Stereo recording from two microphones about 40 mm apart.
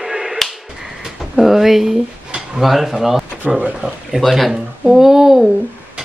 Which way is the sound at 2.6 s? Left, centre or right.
Centre.